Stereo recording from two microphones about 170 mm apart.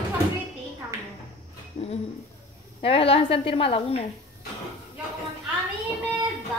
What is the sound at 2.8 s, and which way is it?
A woman's voice, 35° left (ahead or behind).